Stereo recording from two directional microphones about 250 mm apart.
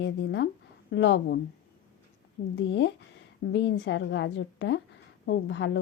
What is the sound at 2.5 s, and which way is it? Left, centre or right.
A woman's voice, left.